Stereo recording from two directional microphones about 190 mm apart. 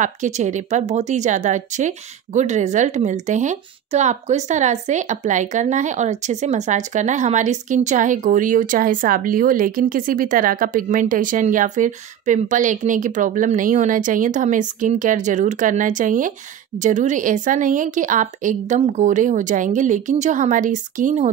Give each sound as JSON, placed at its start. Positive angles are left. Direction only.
{"t": 0.0, "sound": "speech", "side_deg": -40}